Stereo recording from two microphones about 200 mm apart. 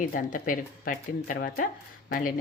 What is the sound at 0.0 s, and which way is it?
Speech, 40° left (ahead or behind).